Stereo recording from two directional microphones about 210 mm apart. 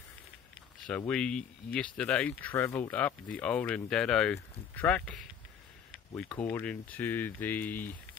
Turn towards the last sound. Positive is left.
turn(degrees=10)  # may be behind; listen again after turning